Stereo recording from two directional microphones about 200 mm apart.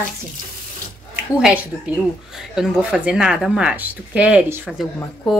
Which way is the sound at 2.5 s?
5° right (ahead or behind).